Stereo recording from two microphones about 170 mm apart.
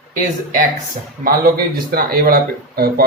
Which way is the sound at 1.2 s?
60° right (ahead or behind).